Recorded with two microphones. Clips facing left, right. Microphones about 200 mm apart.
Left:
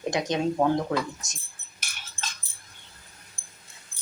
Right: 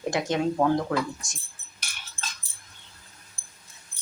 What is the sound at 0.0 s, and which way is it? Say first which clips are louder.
Speech: even; 20° left (ahead or behind).